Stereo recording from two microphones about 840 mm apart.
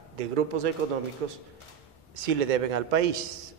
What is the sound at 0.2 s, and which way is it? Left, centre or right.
A man's voice, right.